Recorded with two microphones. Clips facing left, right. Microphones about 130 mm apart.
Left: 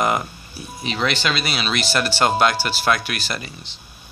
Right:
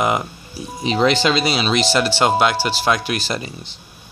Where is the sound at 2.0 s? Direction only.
15° right (ahead or behind).